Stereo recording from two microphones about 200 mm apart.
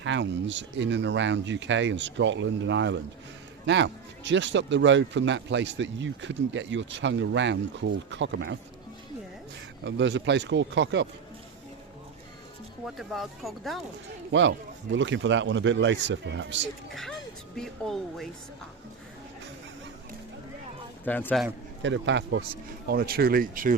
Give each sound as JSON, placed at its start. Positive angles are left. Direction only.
{"t": 0.0, "sound": "speech", "side_deg": -65}
{"t": 9.8, "sound": "speech", "side_deg": -65}
{"t": 12.8, "sound": "speech", "side_deg": 0}
{"t": 14.9, "sound": "speech", "side_deg": -65}
{"t": 16.9, "sound": "speech", "side_deg": 0}
{"t": 21.0, "sound": "speech", "side_deg": 10}
{"t": 21.8, "sound": "speech", "side_deg": -65}
{"t": 22.9, "sound": "speech", "side_deg": -50}